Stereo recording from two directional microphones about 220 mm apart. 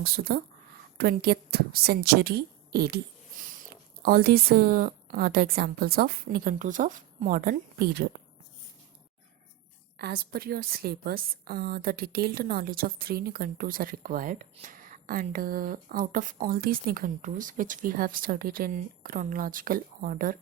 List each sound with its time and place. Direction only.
0.0 s a woman's voice: 45° right (ahead or behind)
3.4 s a sound: 35° right (ahead or behind)
4.0 s a woman's voice: 45° right (ahead or behind)
10.0 s a woman's voice: 45° right (ahead or behind)